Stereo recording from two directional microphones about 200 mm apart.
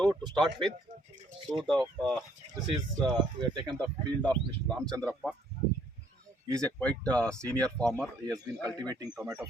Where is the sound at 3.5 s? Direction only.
20° right (ahead or behind).